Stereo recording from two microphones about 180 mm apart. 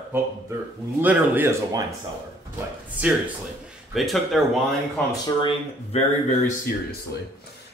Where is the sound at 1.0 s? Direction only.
10° right (ahead or behind).